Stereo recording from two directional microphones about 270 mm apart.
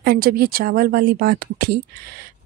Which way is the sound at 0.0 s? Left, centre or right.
Right.